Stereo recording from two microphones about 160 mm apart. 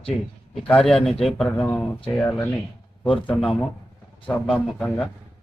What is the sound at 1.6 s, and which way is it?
Speech, 15° left (ahead or behind).